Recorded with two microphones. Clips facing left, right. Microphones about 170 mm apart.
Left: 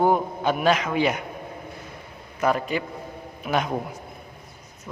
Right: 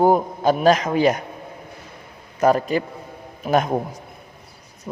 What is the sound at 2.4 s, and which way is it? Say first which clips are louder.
A man's voice: right 6 dB; 40° right (ahead or behind).